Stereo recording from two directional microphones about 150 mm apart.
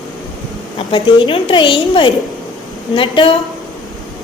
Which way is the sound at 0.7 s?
35° left (ahead or behind).